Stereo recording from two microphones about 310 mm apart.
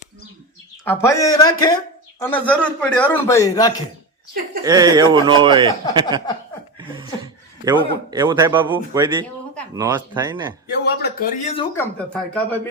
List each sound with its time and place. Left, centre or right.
0.9 s a man's voice: centre
4.6 s a man's voice: centre
7.6 s a man's voice: centre
10.8 s speech: left
11.5 s speech: centre